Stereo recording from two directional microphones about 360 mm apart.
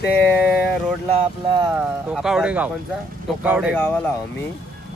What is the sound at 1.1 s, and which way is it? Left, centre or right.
Speech, centre.